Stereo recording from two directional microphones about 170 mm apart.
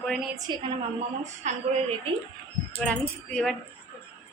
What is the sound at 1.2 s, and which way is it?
Speech, 40° right (ahead or behind).